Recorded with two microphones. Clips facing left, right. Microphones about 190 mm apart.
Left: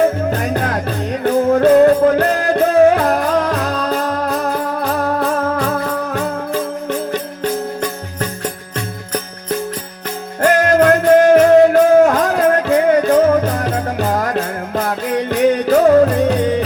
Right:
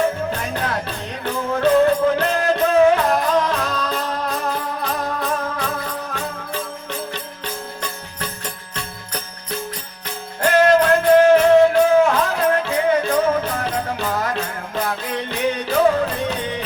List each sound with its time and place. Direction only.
0.3 s music: 40° left (ahead or behind)
4.5 s music: 65° left (ahead or behind)
5.2 s music: 35° left (ahead or behind)
10.4 s music: 45° left (ahead or behind)